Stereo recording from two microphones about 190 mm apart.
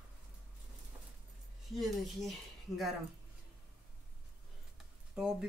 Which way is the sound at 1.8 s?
Centre (ahead or behind).